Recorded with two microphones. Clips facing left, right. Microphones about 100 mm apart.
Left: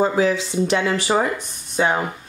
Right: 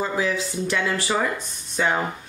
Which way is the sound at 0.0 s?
30° left (ahead or behind).